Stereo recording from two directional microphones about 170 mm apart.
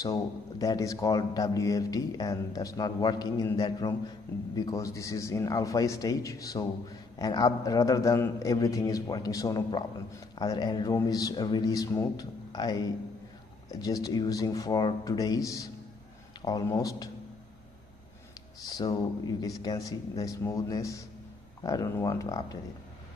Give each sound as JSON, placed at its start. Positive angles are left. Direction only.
{"t": 0.0, "sound": "a man's voice", "side_deg": 20}
{"t": 18.7, "sound": "a man's voice", "side_deg": 20}